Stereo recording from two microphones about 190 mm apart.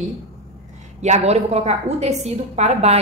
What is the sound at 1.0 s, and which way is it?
A woman's voice, 35° right (ahead or behind).